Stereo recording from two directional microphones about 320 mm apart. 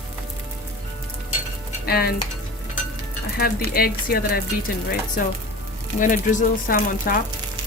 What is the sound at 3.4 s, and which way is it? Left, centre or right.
Speech, left.